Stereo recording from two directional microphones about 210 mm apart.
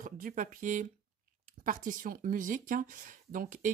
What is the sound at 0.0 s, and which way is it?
Speech, 40° right (ahead or behind).